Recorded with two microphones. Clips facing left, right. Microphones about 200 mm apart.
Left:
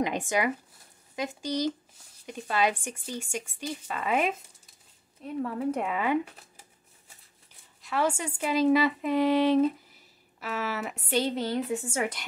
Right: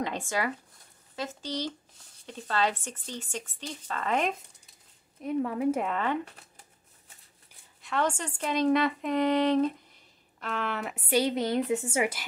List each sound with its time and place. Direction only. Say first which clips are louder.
0.0 s speech: left 3 dB; 15° left (ahead or behind)
5.2 s speech: right 3 dB; 15° right (ahead or behind)
5.8 s speech: left 1 dB; 5° left (ahead or behind)
7.8 s speech: left 1 dB; 5° left (ahead or behind); by 12.1 s 20° right (ahead or behind)